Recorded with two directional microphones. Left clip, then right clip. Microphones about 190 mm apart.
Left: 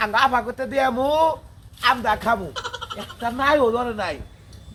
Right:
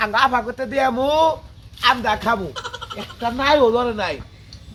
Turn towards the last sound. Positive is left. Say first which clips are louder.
# right 4 dB
turn(degrees=-35)  # may be behind; listen again after turning